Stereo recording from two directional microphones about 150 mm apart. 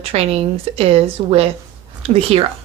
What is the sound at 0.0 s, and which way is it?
A woman's voice, 40° right (ahead or behind).